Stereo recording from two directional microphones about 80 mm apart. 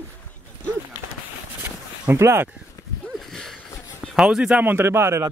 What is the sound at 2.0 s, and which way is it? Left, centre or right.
Speech, right.